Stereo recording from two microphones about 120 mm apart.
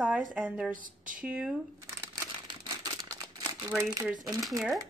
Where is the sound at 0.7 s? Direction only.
90° right.